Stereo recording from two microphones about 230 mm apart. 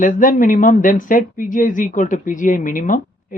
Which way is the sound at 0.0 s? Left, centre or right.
Left.